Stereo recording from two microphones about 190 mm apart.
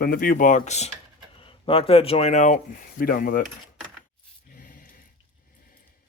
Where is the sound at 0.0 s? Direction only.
50° left (ahead or behind).